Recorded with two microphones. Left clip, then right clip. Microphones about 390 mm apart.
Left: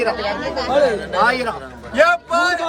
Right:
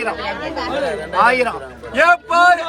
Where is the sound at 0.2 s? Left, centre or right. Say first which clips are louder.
Left 1 dB; centre.